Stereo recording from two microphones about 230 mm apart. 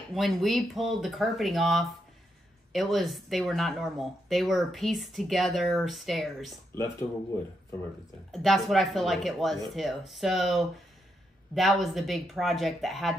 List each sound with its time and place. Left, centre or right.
0.1 s speech: centre
6.7 s speech: centre
8.3 s speech: centre